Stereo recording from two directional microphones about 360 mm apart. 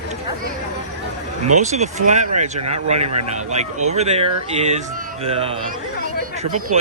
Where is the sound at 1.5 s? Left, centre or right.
Centre.